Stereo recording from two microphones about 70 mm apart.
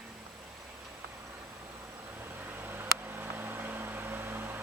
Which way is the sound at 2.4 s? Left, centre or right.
Right.